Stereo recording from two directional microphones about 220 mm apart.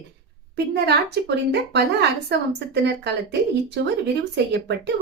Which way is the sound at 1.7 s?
50° right (ahead or behind).